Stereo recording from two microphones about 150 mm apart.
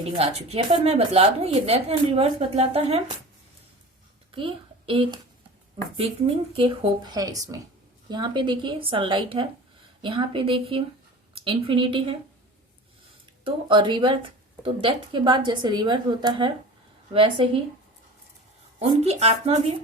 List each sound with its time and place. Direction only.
0.0 s a woman's voice: 40° right (ahead or behind)
4.3 s a child's voice: 35° right (ahead or behind)
13.4 s a woman's voice: 35° right (ahead or behind)
18.8 s a woman's voice: 45° right (ahead or behind)